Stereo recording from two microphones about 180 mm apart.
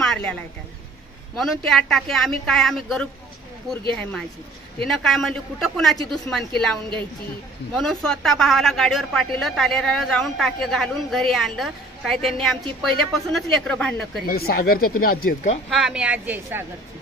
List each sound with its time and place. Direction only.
0.0 s a sound: 5° left (ahead or behind)
1.3 s speech: centre (ahead or behind)
14.2 s speech: 55° left (ahead or behind)
15.7 s speech: 5° right (ahead or behind)